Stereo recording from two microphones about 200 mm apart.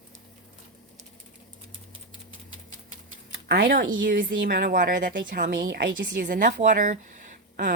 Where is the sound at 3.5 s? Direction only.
50° right (ahead or behind).